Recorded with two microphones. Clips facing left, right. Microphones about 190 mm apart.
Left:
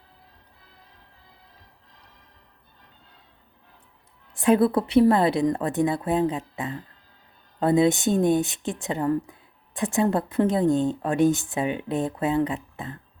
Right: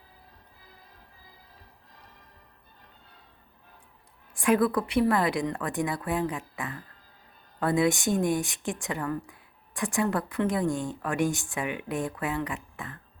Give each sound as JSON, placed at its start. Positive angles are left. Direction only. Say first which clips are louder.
{"t": 4.4, "sound": "speech", "louder": "left 4 dB", "side_deg": 25}